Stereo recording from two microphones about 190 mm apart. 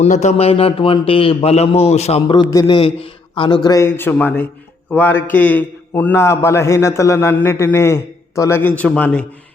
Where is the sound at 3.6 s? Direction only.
15° left (ahead or behind).